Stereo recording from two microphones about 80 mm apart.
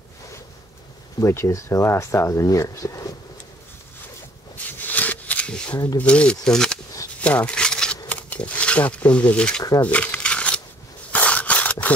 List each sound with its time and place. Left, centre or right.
1.2 s speech: left
4.6 s shuffling cards: left
5.9 s speech: centre
9.8 s crumpling: centre
11.1 s a sound: centre